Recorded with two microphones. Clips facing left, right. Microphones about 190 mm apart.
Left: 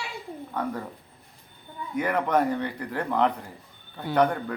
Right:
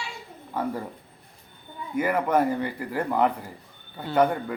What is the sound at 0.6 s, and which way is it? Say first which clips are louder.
Speech: right 2 dB; 5° right (ahead or behind).